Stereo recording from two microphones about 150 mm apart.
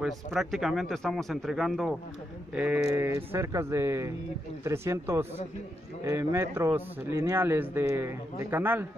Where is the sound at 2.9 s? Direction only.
15° right (ahead or behind).